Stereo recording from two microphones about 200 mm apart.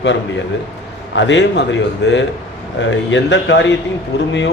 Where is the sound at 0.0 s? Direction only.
65° left (ahead or behind).